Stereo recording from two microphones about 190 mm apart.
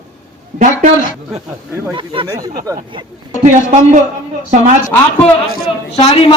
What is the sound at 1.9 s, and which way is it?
Speech, 25° right (ahead or behind).